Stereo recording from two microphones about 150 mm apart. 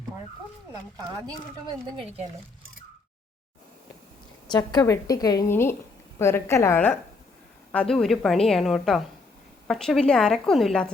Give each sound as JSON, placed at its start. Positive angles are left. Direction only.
{"t": 4.5, "sound": "a woman's voice", "side_deg": 25}